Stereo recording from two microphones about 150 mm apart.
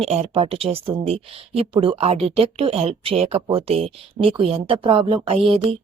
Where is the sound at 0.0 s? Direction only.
45° right (ahead or behind).